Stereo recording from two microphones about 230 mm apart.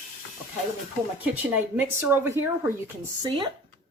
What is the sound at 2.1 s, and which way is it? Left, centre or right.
Speech, centre.